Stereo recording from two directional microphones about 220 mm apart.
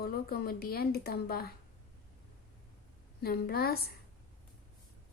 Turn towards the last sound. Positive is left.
turn(degrees=45)  # may be behind; listen again after turning